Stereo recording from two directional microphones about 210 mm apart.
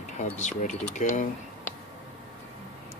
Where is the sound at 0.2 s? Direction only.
35° left (ahead or behind).